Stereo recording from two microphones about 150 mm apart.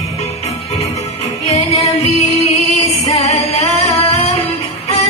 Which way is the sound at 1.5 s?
45° left (ahead or behind).